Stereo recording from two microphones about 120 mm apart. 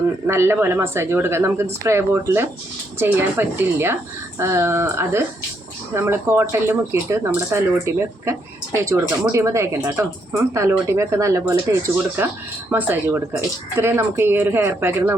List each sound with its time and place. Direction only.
0.3 s speech: 20° right (ahead or behind)